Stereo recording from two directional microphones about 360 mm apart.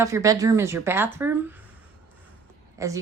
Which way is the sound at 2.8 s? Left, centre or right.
Centre.